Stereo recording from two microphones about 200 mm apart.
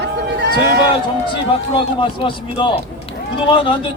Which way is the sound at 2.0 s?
25° left (ahead or behind).